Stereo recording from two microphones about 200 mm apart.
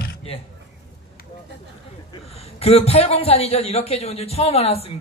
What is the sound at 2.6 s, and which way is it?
A man's voice, 30° left (ahead or behind).